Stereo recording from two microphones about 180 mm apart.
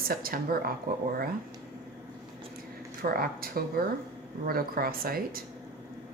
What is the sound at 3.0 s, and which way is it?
Speech, 55° right (ahead or behind).